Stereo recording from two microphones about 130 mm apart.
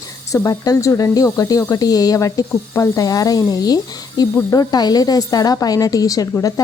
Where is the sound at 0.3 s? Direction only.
25° left (ahead or behind).